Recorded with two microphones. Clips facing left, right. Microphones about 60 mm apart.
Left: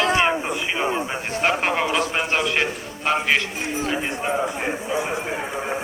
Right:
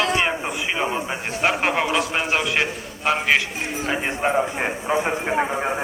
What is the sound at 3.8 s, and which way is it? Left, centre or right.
Speech, right.